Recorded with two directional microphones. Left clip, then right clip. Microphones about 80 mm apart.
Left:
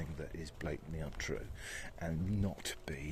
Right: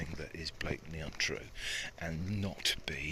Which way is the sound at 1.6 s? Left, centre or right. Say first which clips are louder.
Right 6 dB; left.